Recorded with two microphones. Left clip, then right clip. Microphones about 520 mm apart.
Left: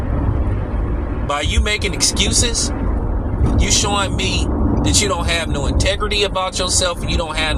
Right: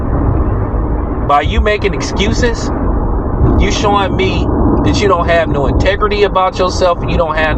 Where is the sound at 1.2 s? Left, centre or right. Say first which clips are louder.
Right 8 dB; left.